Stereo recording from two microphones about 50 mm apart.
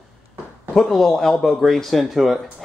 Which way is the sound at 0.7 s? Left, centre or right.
Centre.